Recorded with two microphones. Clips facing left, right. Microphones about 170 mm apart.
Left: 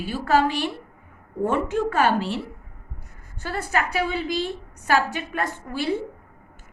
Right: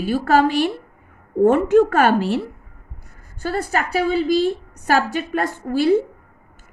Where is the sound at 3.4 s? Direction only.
35° right (ahead or behind).